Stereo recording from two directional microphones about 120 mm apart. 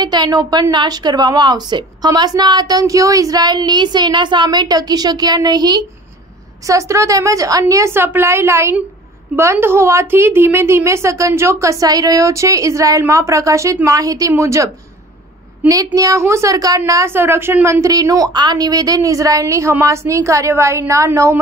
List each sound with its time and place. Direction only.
0.0 s a woman's voice: 35° right (ahead or behind)
15.7 s a woman's voice: 30° right (ahead or behind)